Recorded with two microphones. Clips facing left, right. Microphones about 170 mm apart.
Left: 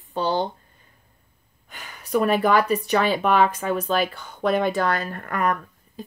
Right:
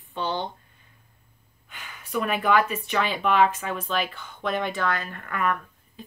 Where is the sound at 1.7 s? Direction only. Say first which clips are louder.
Left 10 dB; 40° left (ahead or behind).